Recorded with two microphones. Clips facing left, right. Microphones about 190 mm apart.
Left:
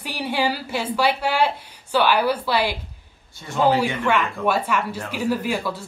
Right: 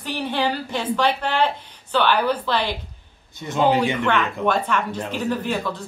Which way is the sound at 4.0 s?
10° left (ahead or behind).